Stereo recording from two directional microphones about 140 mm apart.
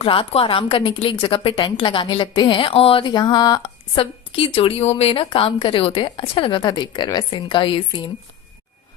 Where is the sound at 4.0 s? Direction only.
40° left (ahead or behind).